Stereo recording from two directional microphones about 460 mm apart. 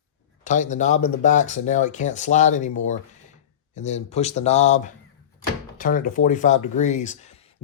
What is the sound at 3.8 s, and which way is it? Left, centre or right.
Speech, centre.